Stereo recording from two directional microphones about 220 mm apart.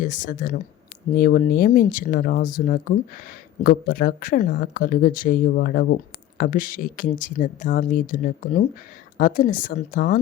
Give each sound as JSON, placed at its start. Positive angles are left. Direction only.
{"t": 0.0, "sound": "speech", "side_deg": 40}